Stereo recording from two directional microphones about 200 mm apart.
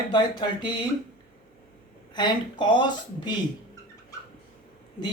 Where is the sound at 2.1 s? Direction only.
20° left (ahead or behind).